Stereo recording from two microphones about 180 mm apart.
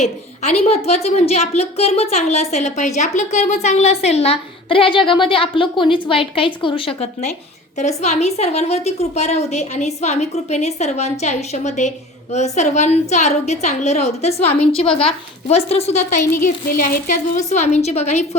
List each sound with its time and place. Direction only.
0.0 s a woman's voice: 35° left (ahead or behind)